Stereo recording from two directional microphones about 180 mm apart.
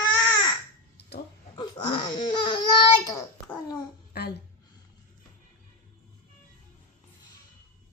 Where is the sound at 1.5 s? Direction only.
25° left (ahead or behind).